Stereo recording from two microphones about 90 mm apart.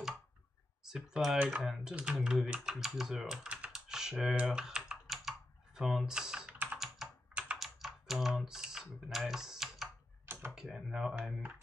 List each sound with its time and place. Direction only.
0.8 s speech: 5° right (ahead or behind)
3.4 s typing: 10° right (ahead or behind)
4.4 s computer keyboard: 10° right (ahead or behind)
5.8 s speech: 5° right (ahead or behind)
7.0 s computer keyboard: 5° right (ahead or behind)
7.5 s typing: centre (ahead or behind)
10.2 s computer keyboard: 25° right (ahead or behind)
10.5 s speech: 5° right (ahead or behind)